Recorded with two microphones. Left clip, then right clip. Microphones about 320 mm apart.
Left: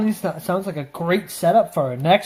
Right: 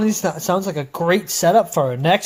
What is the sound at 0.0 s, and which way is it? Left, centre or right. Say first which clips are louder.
Speech: right 4 dB; right.